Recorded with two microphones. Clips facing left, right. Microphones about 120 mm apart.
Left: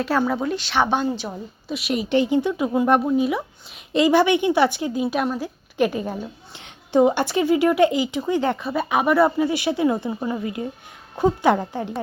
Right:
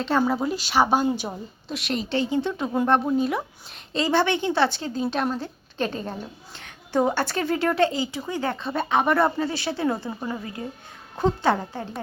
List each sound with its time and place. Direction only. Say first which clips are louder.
0.2 s a woman's voice: left 1 dB; 5° right (ahead or behind)
1.6 s a woman's voice: left 4 dB; 5° left (ahead or behind)
8.6 s a woman's voice: left 2 dB; 10° left (ahead or behind)